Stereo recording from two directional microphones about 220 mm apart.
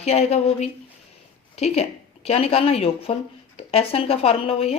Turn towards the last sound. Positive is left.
turn(degrees=25)  # may be behind; listen again after turning